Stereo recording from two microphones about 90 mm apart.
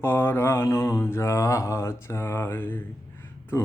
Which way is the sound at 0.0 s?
25° left (ahead or behind).